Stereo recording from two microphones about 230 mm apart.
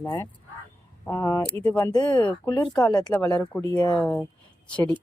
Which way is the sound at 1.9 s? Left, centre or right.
Centre.